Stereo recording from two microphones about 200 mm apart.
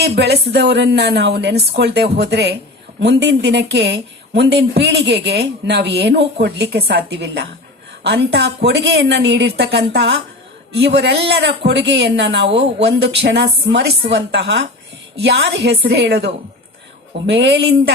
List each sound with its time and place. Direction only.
0.0 s a woman's voice: 55° right (ahead or behind)